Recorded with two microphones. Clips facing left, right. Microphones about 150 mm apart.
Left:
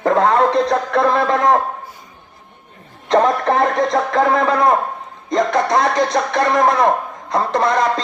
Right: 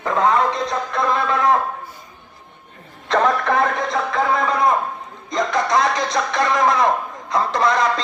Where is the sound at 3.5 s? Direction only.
35° left (ahead or behind).